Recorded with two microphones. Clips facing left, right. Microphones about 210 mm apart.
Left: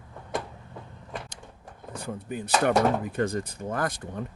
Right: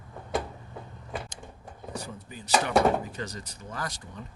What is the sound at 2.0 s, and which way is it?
Speech, 55° left (ahead or behind).